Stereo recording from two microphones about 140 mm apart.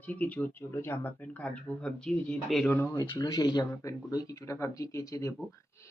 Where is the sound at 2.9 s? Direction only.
30° left (ahead or behind).